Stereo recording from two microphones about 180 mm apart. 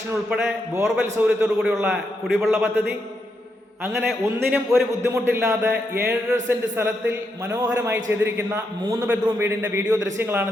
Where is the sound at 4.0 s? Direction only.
5° right (ahead or behind).